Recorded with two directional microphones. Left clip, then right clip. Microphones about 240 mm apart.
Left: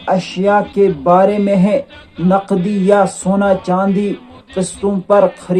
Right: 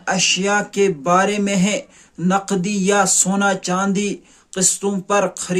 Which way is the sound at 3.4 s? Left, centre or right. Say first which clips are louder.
Left 8 dB; right.